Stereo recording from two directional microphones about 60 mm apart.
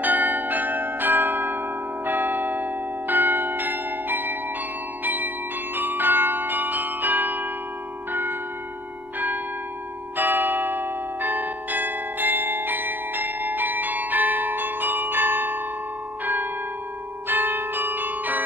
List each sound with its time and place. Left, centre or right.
0.0 s change ringing: right
2.0 s church bell: right
5.0 s change ringing: right
8.1 s tubular bells: right
10.1 s bell: right
17.3 s change ringing: right